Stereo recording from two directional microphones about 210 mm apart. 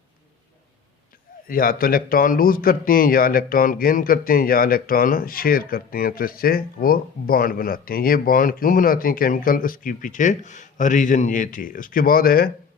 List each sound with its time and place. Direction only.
1.5 s a man's voice: 45° left (ahead or behind)